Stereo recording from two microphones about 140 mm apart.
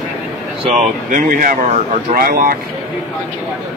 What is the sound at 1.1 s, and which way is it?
Speech, 75° right (ahead or behind).